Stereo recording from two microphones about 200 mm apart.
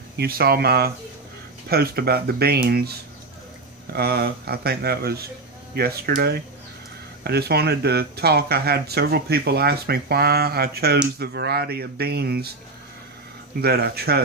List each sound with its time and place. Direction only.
0.2 s speech: 50° right (ahead or behind)
3.9 s speech: 50° right (ahead or behind)
13.6 s speech: 50° right (ahead or behind)